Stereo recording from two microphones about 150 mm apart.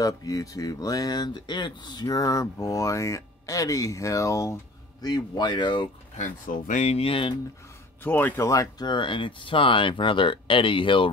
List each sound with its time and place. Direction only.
0.0 s speech: 25° left (ahead or behind)
6.1 s speech: 60° left (ahead or behind); by 7.3 s 35° left (ahead or behind)
8.0 s speech: 10° left (ahead or behind); by 11.1 s 35° left (ahead or behind)